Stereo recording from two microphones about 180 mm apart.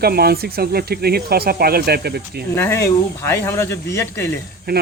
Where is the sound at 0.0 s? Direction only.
60° right (ahead or behind).